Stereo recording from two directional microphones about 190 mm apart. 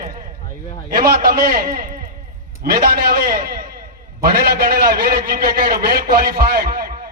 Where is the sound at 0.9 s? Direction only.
50° right (ahead or behind).